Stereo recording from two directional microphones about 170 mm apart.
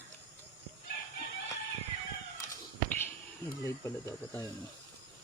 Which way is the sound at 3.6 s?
15° left (ahead or behind).